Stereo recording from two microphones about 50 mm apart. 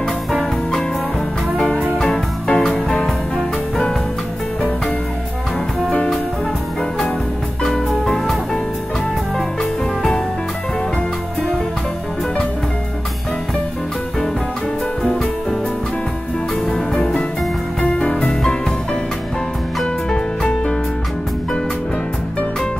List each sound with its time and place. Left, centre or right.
2.0 s music: centre
9.6 s music: centre
17.9 s music: left
20.1 s music: centre